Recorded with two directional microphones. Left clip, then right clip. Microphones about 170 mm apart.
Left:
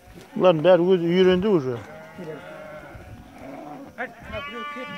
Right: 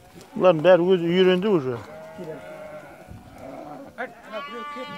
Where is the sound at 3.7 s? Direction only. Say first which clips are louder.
Left 1 dB; 40° right (ahead or behind).